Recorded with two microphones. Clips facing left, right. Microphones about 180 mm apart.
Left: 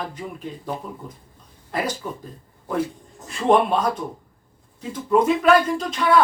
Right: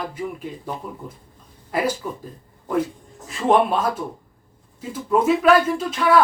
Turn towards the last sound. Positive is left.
turn(degrees=-5)  # may be behind; listen again after turning